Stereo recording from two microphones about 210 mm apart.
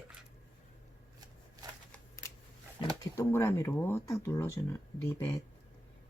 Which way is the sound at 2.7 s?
15° left (ahead or behind).